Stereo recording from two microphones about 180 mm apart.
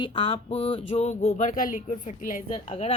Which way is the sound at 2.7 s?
30° left (ahead or behind).